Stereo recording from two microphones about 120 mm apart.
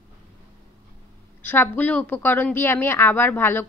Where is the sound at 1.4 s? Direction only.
15° left (ahead or behind).